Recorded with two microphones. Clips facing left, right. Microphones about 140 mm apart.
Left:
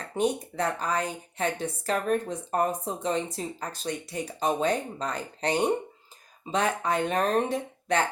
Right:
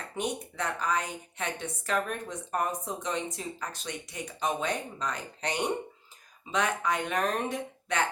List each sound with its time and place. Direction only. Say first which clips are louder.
0.2 s a woman's voice: left 6 dB; 35° left (ahead or behind)